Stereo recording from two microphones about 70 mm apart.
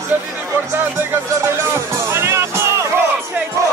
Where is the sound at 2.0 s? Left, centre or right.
Right.